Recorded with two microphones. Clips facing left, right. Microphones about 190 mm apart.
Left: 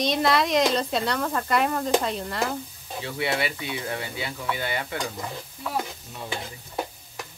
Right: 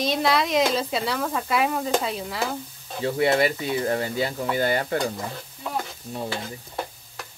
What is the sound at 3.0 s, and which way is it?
Speech, 40° right (ahead or behind).